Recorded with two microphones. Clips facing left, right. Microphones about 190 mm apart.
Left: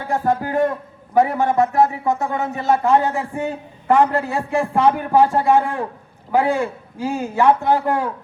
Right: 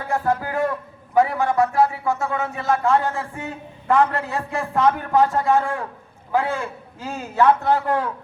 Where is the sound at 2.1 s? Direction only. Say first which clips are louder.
Left 2 dB; 35° left (ahead or behind).